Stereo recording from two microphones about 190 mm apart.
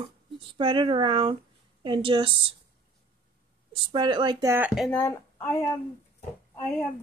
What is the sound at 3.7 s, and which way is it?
Speech, 25° right (ahead or behind).